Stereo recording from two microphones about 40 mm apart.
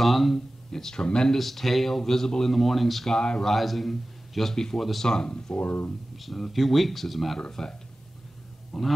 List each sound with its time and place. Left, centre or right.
0.0 s a man's voice: centre
0.7 s speech: centre
1.4 s speech: centre
2.5 s a man's voice: centre
3.1 s speech: centre
3.5 s a man's voice: centre
5.0 s speech: centre; by 5.9 s left
6.1 s a man's voice: centre
7.3 s speech: centre
8.7 s a man's voice: centre